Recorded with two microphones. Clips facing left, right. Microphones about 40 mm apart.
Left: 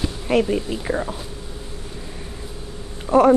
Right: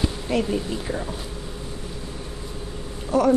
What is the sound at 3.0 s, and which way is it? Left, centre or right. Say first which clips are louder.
Speech: left 5 dB; left.